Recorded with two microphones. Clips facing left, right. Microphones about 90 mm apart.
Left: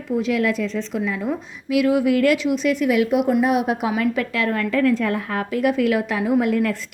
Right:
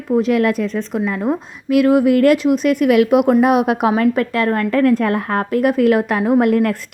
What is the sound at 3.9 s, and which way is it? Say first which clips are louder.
A woman's voice: right 6 dB; 45° right (ahead or behind).